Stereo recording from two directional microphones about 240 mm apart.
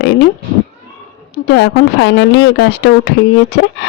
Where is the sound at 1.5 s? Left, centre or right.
Left.